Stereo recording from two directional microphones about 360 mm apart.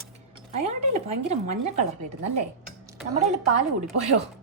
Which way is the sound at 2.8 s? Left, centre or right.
Centre.